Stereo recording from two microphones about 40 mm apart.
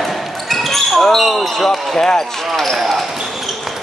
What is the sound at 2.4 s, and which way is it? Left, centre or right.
Speech, centre.